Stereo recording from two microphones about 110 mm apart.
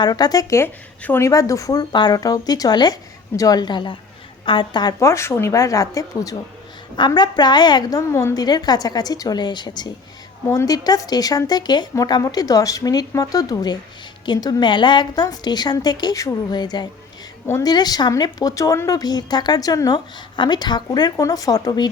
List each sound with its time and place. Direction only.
0.0 s a woman's voice: 35° left (ahead or behind)
0.6 s a woman's voice: 20° left (ahead or behind)